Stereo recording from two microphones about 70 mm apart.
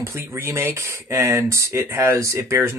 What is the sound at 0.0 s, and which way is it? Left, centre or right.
Speech, right.